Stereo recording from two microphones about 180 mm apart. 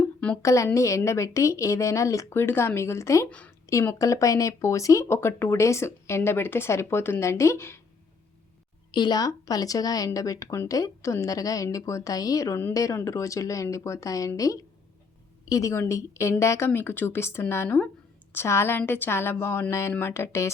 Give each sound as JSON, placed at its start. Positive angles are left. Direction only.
{"t": 0.4, "sound": "a woman's voice", "side_deg": 15}
{"t": 8.9, "sound": "a woman's voice", "side_deg": 25}